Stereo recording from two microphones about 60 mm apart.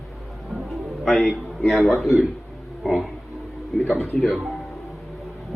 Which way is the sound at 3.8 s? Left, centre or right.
Left.